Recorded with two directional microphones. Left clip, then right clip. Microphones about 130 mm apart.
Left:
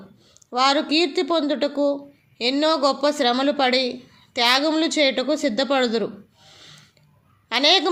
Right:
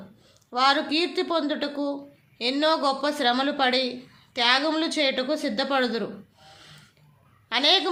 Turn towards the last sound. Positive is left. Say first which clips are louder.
# left 3 dB
turn(degrees=40)  # may be behind; listen again after turning